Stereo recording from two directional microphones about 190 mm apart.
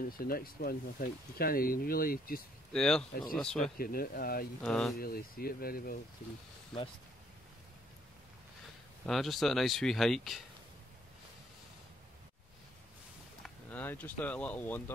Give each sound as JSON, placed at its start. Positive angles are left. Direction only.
{"t": 0.1, "sound": "speech", "side_deg": 50}
{"t": 2.7, "sound": "speech", "side_deg": 5}
{"t": 3.7, "sound": "speech", "side_deg": 50}
{"t": 4.6, "sound": "speech", "side_deg": 0}
{"t": 4.9, "sound": "speech", "side_deg": 50}
{"t": 9.0, "sound": "speech", "side_deg": 0}
{"t": 13.4, "sound": "speech", "side_deg": 10}